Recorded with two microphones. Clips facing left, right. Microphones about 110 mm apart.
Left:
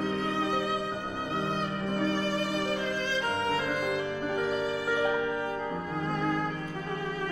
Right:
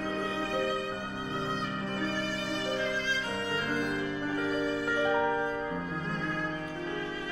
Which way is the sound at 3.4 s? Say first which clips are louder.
Left 3 dB; 60° left (ahead or behind).